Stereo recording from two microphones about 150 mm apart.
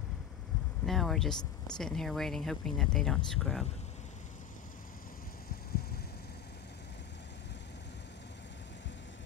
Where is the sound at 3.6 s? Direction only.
45° left (ahead or behind); by 6.8 s 90° left.